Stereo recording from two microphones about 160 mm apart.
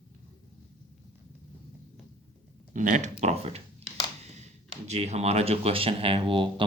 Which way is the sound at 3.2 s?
40° right (ahead or behind).